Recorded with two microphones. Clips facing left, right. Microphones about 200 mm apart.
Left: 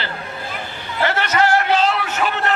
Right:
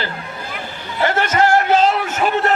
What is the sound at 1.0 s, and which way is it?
A man's voice, 50° right (ahead or behind).